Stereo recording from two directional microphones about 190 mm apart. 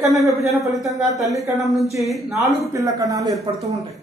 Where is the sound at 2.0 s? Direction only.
Centre (ahead or behind).